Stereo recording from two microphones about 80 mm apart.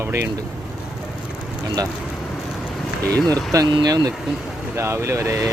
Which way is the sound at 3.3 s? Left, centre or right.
Right.